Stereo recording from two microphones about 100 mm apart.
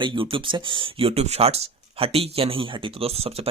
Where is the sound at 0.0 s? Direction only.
60° right (ahead or behind).